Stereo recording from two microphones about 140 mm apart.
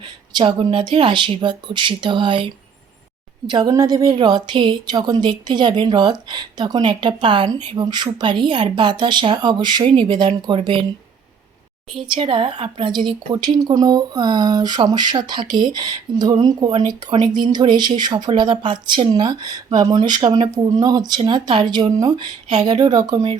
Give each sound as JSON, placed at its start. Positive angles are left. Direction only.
{"t": 0.3, "sound": "speech", "side_deg": -35}
{"t": 3.5, "sound": "speech", "side_deg": -25}
{"t": 11.9, "sound": "speech", "side_deg": -40}